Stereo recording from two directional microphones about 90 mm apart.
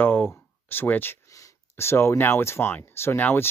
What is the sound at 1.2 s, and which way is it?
Speech, 35° left (ahead or behind).